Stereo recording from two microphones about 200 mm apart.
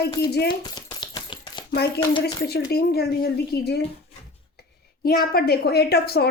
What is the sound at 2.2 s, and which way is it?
A woman's voice, 50° left (ahead or behind).